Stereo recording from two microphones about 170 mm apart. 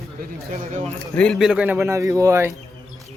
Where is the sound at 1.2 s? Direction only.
Centre (ahead or behind); by 2.5 s 15° right (ahead or behind).